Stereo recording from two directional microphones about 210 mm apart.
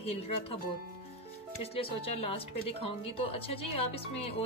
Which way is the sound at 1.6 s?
30° left (ahead or behind).